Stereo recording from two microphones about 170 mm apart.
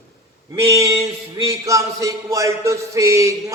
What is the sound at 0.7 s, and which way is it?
Music, 15° right (ahead or behind).